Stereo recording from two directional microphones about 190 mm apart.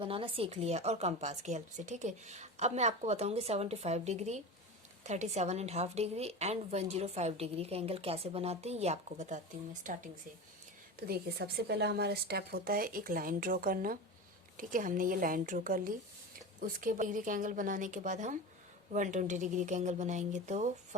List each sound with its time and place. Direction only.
0.0 s a woman's voice: 30° right (ahead or behind)
11.0 s a woman's voice: 55° right (ahead or behind); by 20.7 s 40° right (ahead or behind)